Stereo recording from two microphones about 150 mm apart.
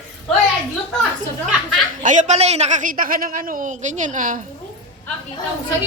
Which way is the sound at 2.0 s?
55° right (ahead or behind).